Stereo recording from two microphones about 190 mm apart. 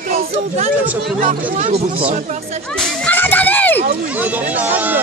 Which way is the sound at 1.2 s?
40° right (ahead or behind).